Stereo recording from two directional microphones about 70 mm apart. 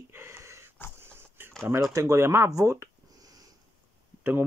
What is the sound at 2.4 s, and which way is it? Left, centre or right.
Speech, right.